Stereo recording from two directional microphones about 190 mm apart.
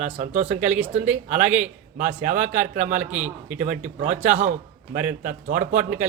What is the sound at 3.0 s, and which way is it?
Speech, 5° right (ahead or behind).